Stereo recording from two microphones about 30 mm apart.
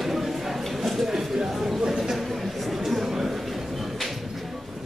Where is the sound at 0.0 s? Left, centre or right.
Centre.